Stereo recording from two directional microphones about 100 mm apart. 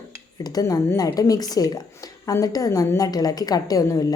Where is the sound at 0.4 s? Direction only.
40° left (ahead or behind).